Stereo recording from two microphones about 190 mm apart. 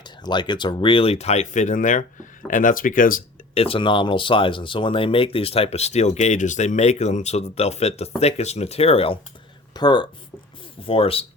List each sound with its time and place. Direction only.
0.0 s speech: 25° left (ahead or behind); by 3.6 s 45° left (ahead or behind)
3.6 s speech: 30° left (ahead or behind)